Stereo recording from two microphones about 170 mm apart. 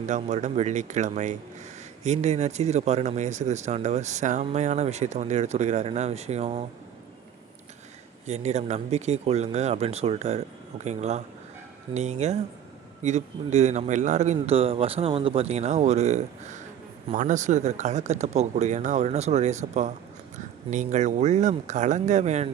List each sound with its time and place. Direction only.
0.1 s speech: 45° right (ahead or behind)
8.3 s speech: 40° right (ahead or behind)